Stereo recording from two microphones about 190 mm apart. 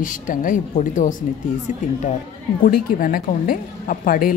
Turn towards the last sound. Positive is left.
turn(degrees=50)  # may be behind; listen again after turning